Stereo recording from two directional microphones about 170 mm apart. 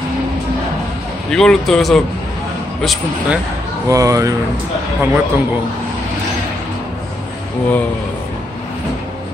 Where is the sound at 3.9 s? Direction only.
20° right (ahead or behind).